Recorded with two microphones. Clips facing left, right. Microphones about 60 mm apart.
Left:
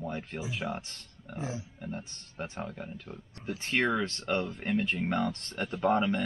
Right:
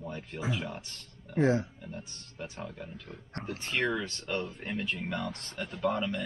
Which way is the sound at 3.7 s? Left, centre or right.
Left.